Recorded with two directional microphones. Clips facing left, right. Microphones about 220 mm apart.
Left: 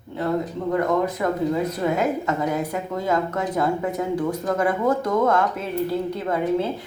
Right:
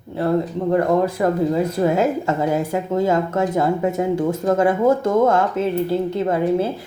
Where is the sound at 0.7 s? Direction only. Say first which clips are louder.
Right 4 dB; 30° right (ahead or behind).